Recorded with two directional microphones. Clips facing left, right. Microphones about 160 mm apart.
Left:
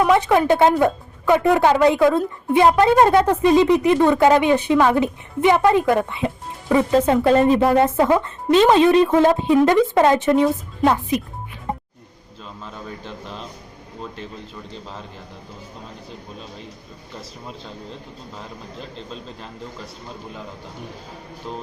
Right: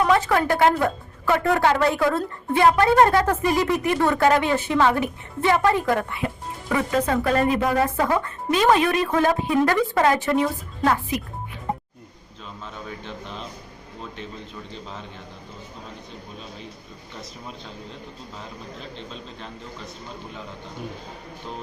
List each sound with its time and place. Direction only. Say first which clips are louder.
0.0 s a woman's voice: left 4 dB; 20° left (ahead or behind)
12.6 s speech: left 1 dB; centre (ahead or behind)
18.9 s speech: left 2 dB; centre (ahead or behind)